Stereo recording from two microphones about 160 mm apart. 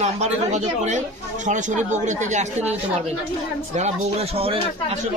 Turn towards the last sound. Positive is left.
turn(degrees=-35)  # may be behind; listen again after turning